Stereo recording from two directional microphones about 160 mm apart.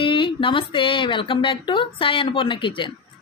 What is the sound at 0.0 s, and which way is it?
Speech, 30° left (ahead or behind).